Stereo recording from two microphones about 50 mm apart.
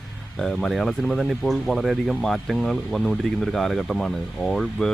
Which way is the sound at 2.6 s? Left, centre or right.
Centre.